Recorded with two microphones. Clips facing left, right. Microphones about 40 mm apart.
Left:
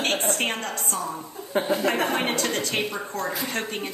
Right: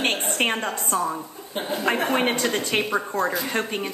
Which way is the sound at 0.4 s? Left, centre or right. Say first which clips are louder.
Right 3 dB; right.